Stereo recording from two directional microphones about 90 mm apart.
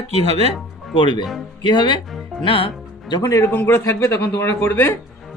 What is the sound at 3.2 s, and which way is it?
Speech, 30° left (ahead or behind).